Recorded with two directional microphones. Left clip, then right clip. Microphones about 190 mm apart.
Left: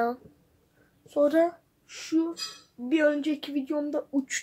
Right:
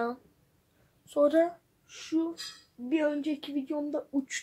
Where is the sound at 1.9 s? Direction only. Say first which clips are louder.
Left 4 dB; 10° left (ahead or behind).